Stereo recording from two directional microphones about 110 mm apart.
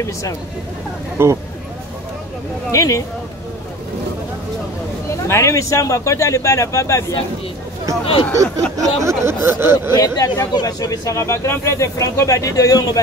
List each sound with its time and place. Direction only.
1.1 s speech: 25° right (ahead or behind)
2.7 s speech: 30° left (ahead or behind)
5.1 s speech: 25° left (ahead or behind)
8.0 s speech: 55° left (ahead or behind)
9.0 s speech: 25° right (ahead or behind)
9.9 s speech: 35° left (ahead or behind)